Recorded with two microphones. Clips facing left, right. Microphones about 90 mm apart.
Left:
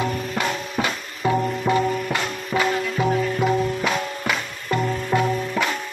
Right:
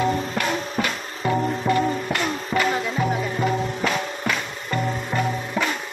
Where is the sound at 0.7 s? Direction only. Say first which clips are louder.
Even; 15° left (ahead or behind).